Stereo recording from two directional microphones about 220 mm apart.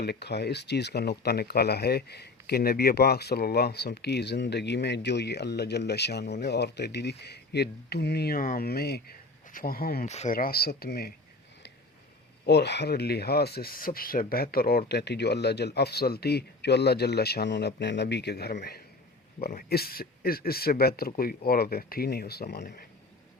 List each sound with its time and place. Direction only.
0.0 s speech: 50° left (ahead or behind)
12.5 s speech: 50° left (ahead or behind)